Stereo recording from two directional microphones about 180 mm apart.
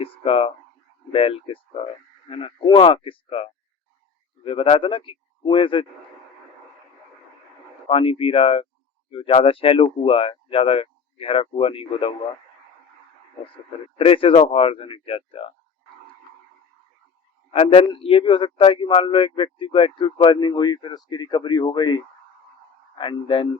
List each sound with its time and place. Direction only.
0.0 s a sound: 30° left (ahead or behind)
1.1 s speech: 30° left (ahead or behind)
7.9 s speech: 30° left (ahead or behind)
14.0 s speech: 30° left (ahead or behind)
17.5 s speech: 35° left (ahead or behind)